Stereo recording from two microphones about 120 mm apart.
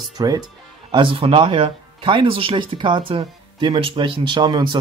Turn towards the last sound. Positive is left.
turn(degrees=-35)  # may be behind; listen again after turning